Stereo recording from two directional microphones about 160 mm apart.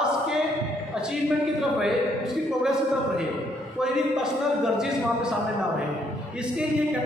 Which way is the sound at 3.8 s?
5° right (ahead or behind).